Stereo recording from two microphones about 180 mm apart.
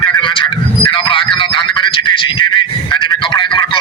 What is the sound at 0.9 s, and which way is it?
Speech, 25° left (ahead or behind).